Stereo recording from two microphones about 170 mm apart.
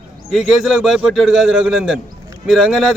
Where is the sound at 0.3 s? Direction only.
5° right (ahead or behind).